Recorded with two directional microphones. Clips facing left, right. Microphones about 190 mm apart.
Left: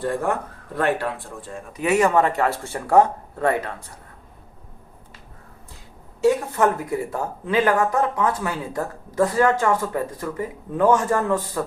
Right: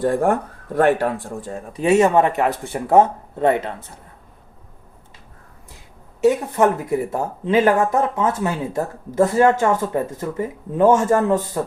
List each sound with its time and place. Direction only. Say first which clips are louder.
0.0 s speech: right 6 dB; 45° right (ahead or behind); by 3.9 s 20° right (ahead or behind)
7.1 s speech: right 5 dB; 25° right (ahead or behind)